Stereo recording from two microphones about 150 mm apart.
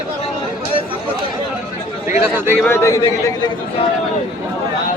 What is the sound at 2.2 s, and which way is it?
Speech, 15° right (ahead or behind).